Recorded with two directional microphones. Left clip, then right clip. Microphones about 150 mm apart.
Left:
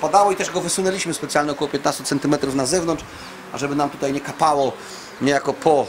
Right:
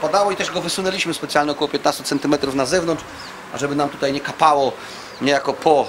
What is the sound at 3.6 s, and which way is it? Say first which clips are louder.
Speech: right 2 dB; 5° right (ahead or behind).